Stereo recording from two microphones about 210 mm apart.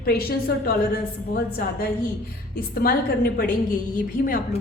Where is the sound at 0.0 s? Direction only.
45° left (ahead or behind).